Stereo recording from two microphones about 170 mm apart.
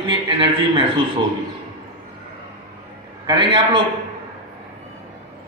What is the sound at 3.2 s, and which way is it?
Speech, 30° right (ahead or behind).